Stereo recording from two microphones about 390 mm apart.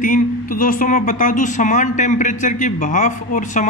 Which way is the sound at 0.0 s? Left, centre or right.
Left.